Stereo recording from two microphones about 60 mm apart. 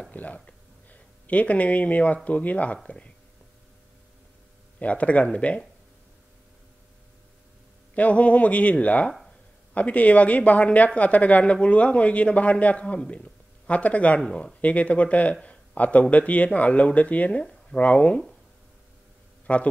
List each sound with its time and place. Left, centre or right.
0.1 s a sound: left
2.2 s speech: left
4.7 s speech: left
7.9 s speech: left
19.4 s speech: left